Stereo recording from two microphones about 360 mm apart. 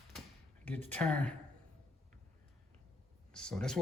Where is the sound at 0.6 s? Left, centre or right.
Centre.